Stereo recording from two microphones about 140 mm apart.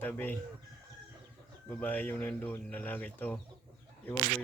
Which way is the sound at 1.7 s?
10° left (ahead or behind).